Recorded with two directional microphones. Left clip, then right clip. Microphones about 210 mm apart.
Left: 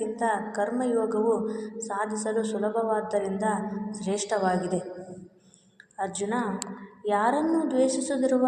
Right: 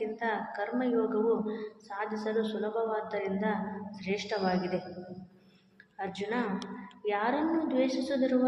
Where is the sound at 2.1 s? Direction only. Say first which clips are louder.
Left 4 dB; 20° left (ahead or behind).